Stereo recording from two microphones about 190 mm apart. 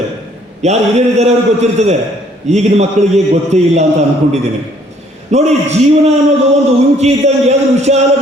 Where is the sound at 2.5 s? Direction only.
35° right (ahead or behind).